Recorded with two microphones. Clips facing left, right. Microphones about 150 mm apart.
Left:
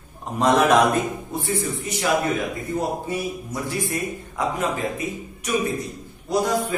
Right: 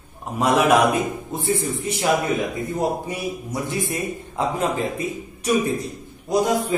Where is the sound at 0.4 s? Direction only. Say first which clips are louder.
Even; 10° right (ahead or behind).